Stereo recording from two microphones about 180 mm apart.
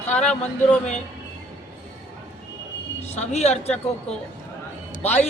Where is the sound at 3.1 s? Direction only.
40° left (ahead or behind).